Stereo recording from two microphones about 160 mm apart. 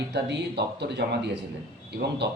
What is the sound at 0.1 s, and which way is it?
A man's voice, 90° right.